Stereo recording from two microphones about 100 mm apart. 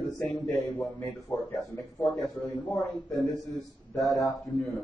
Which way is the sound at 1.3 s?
25° left (ahead or behind).